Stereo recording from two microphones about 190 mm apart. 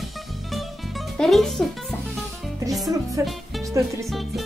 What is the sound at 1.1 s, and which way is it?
Speech, centre (ahead or behind).